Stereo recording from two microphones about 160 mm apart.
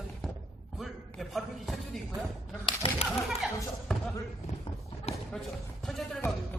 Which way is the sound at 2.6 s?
35° left (ahead or behind).